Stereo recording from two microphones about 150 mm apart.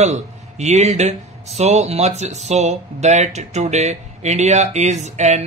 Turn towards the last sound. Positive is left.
turn(degrees=-50)  # may be behind; listen again after turning